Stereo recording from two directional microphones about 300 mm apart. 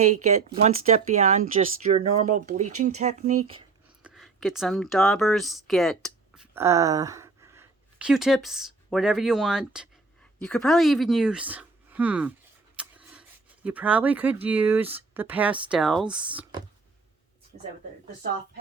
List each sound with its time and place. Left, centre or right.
0.0 s speech: right
4.0 s speech: centre
12.7 s a sound: centre
14.4 s speech: centre